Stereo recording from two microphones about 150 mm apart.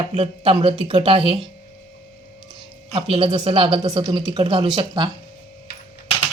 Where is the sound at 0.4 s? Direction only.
35° right (ahead or behind).